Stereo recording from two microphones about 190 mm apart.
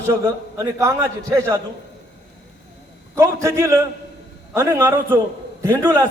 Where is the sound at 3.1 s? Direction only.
15° right (ahead or behind).